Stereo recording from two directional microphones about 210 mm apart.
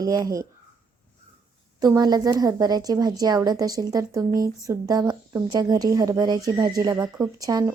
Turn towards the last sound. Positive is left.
turn(degrees=-15)  # may be behind; listen again after turning